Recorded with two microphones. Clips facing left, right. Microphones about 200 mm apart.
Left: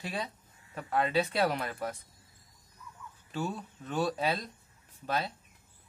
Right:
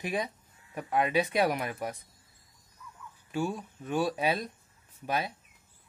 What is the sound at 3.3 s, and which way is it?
Speech, 10° right (ahead or behind).